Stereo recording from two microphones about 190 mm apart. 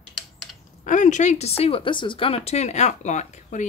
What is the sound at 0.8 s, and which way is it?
Speech, 40° left (ahead or behind).